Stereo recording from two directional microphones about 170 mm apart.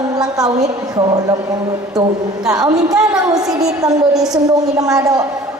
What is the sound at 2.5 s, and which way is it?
Speech, 20° right (ahead or behind).